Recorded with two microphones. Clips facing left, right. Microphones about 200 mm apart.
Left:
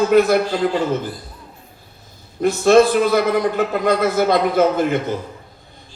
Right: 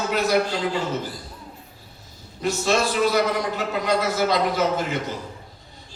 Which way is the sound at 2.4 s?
55° left (ahead or behind).